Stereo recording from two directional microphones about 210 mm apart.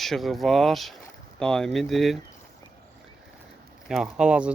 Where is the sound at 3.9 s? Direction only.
5° right (ahead or behind).